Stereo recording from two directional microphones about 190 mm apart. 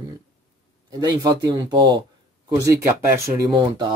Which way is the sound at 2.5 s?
15° right (ahead or behind).